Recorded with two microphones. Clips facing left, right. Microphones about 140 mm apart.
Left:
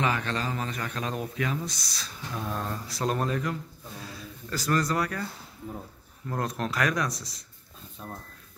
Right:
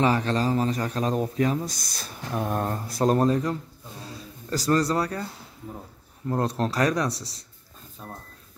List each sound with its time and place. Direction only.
0.0 s a man's voice: 35° right (ahead or behind)
6.2 s a man's voice: 30° right (ahead or behind)
8.0 s speech: 5° right (ahead or behind)